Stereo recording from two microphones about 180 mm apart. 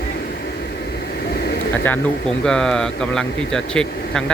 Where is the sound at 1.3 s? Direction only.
60° left (ahead or behind).